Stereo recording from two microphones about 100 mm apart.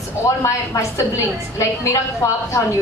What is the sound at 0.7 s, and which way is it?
Speech, 35° left (ahead or behind).